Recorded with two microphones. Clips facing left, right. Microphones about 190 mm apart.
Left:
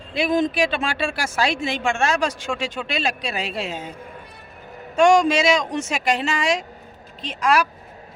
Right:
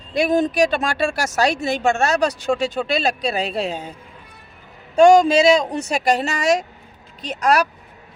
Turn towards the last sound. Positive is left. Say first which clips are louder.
# right 2 dB
turn(degrees=-40)  # may be behind; listen again after turning